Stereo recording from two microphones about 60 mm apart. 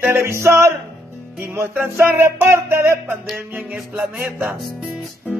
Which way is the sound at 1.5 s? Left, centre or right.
Right.